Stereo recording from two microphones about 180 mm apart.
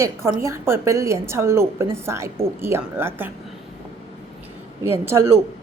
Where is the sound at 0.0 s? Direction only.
15° right (ahead or behind).